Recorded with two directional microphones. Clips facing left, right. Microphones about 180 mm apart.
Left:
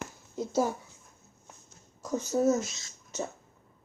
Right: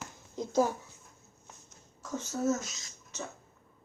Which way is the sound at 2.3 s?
25° left (ahead or behind).